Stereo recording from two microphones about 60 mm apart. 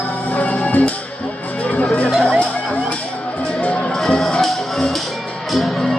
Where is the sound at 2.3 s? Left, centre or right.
Left.